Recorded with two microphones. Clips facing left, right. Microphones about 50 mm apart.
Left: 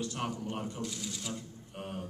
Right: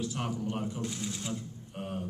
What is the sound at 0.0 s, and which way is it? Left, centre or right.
Speech, centre.